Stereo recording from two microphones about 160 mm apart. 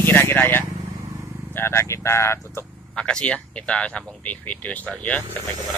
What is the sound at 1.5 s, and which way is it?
Speech, 15° left (ahead or behind).